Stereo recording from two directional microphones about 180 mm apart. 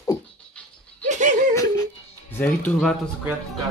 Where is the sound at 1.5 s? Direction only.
20° left (ahead or behind).